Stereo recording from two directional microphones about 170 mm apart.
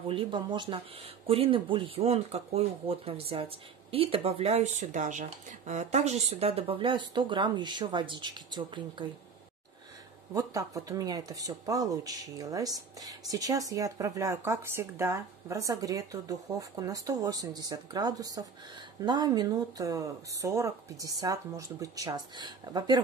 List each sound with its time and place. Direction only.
0.1 s speech: 30° right (ahead or behind)
10.3 s speech: 20° right (ahead or behind)